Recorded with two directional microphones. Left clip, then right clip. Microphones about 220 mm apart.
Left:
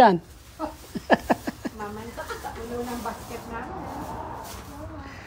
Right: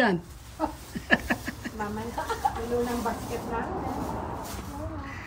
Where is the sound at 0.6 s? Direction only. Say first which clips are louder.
Right 2 dB; 5° left (ahead or behind).